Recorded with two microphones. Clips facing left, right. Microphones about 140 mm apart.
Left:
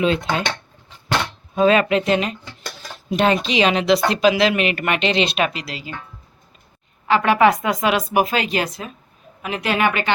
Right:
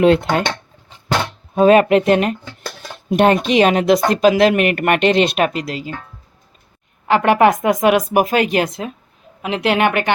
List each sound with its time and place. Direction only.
0.0 s speech: 65° right (ahead or behind)
1.6 s speech: 50° right (ahead or behind)
7.1 s speech: 55° right (ahead or behind)